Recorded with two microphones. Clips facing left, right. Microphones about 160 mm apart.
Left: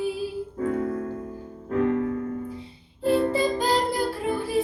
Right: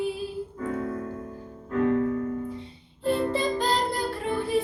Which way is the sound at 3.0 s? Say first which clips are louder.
Left 3 dB; 5° left (ahead or behind).